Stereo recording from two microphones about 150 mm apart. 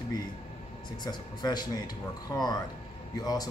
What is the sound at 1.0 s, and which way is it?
A man's voice, 25° left (ahead or behind).